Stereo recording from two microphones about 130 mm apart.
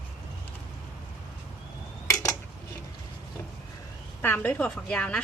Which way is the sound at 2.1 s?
25° left (ahead or behind).